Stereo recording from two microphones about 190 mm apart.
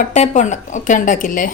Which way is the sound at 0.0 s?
40° left (ahead or behind).